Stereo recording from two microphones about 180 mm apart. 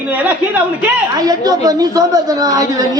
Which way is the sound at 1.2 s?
20° right (ahead or behind).